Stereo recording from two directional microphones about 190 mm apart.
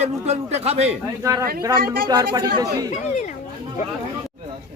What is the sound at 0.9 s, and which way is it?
A man's voice, 15° right (ahead or behind).